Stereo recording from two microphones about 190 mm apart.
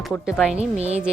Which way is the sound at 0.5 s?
35° right (ahead or behind).